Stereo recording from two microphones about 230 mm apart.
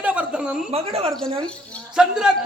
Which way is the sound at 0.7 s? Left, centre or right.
Right.